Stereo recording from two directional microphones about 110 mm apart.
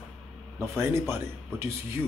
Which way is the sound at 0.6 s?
20° right (ahead or behind).